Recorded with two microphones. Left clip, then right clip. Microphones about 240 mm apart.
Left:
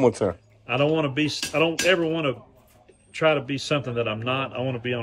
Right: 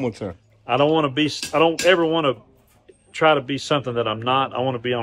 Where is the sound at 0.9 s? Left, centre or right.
Centre.